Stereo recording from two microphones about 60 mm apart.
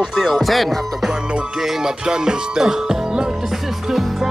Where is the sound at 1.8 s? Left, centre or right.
Centre.